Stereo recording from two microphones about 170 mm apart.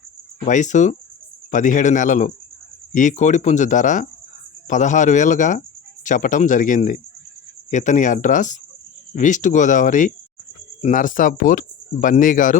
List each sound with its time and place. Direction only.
0.4 s speech: 45° left (ahead or behind)